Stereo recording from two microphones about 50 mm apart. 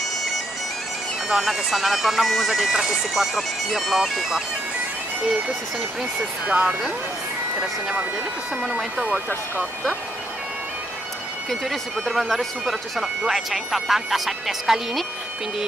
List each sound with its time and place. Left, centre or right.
1.3 s speech: centre
6.4 s speech: right
8.6 s speech: centre
11.7 s speech: centre